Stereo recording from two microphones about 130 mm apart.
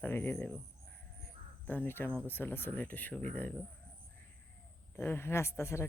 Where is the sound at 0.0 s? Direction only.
15° left (ahead or behind).